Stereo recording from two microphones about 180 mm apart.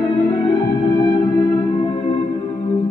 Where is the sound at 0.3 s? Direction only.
25° left (ahead or behind).